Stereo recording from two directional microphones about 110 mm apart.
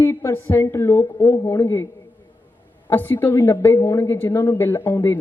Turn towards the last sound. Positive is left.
turn(degrees=25)  # may be behind; listen again after turning